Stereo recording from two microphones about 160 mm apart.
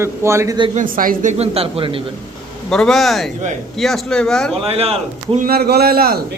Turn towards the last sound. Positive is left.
turn(degrees=-70)  # may be behind; listen again after turning